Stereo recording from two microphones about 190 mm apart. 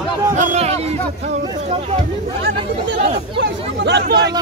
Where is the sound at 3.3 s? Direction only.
65° right (ahead or behind).